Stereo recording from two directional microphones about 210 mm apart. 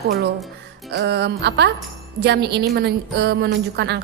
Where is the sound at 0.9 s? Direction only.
55° right (ahead or behind).